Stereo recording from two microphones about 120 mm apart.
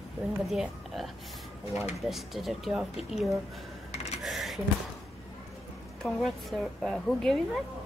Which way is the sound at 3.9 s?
70° left (ahead or behind).